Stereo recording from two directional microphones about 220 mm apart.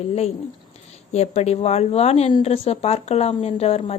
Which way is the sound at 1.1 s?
30° left (ahead or behind).